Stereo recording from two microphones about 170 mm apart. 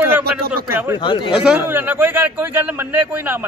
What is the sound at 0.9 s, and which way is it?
Speech, 30° left (ahead or behind).